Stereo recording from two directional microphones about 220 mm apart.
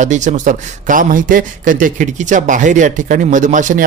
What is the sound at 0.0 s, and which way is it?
A man's voice, 35° right (ahead or behind).